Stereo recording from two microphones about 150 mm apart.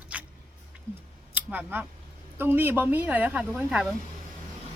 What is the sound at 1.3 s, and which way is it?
A woman's voice, 10° right (ahead or behind).